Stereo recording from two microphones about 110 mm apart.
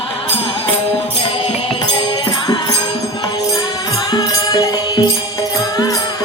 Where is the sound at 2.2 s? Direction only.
35° left (ahead or behind).